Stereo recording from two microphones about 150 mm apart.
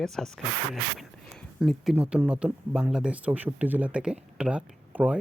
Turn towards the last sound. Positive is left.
turn(degrees=-10)  # may be behind; listen again after turning